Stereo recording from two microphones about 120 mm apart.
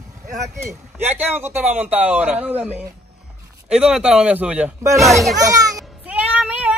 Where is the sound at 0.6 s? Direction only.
15° right (ahead or behind).